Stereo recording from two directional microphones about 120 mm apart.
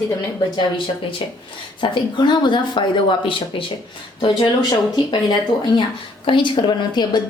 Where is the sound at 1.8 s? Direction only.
40° left (ahead or behind).